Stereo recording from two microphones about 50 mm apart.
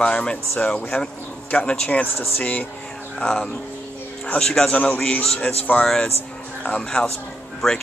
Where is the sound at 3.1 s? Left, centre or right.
Centre.